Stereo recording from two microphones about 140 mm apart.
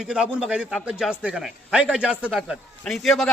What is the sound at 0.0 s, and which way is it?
A man's voice, 5° right (ahead or behind).